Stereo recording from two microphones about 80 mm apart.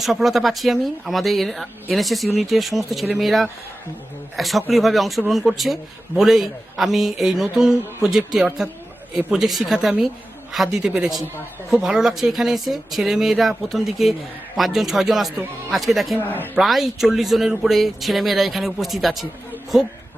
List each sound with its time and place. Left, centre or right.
0.0 s a woman's voice: centre
16.2 s speech: left
16.6 s a woman's voice: centre